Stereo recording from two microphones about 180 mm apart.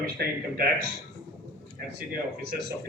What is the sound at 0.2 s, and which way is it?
Speech, 60° right (ahead or behind).